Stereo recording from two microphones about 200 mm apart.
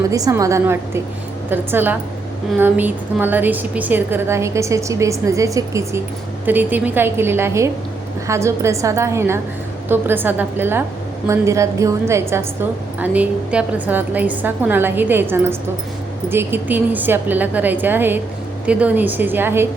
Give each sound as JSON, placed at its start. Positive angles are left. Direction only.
{"t": 0.1, "sound": "a woman's voice", "side_deg": -15}